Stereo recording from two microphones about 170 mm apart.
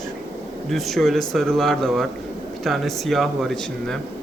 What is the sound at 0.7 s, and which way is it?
Speech, centre (ahead or behind).